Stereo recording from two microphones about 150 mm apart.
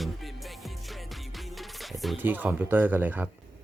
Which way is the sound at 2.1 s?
10° right (ahead or behind).